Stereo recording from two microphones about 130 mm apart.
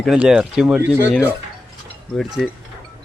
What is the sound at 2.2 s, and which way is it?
Speech, 5° right (ahead or behind).